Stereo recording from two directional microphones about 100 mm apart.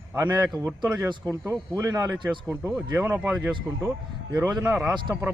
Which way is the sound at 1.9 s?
40° right (ahead or behind).